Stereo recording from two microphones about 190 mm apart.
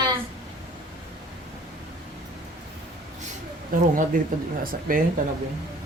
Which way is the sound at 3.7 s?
45° right (ahead or behind).